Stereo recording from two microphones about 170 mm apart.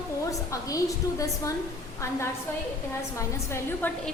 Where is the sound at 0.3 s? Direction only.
20° left (ahead or behind).